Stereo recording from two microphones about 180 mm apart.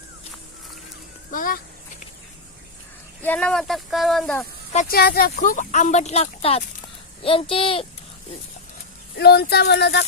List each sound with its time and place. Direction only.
1.3 s speech: 50° left (ahead or behind)
3.2 s speech: 10° left (ahead or behind)
4.7 s speech: 45° left (ahead or behind)
4.9 s speech: 60° left (ahead or behind); by 7.9 s 30° left (ahead or behind)
9.1 s speech: 60° left (ahead or behind)